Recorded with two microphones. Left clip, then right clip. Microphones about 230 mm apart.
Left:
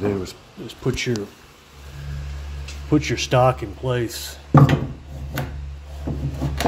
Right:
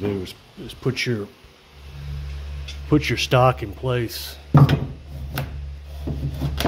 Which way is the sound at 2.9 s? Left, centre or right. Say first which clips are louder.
Right 1 dB; right.